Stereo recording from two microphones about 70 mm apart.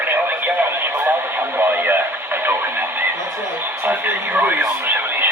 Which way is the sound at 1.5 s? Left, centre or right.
Right.